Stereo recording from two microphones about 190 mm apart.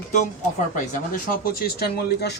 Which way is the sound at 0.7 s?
45° left (ahead or behind).